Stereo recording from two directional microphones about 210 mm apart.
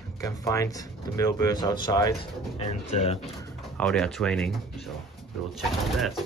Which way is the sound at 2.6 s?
30° left (ahead or behind).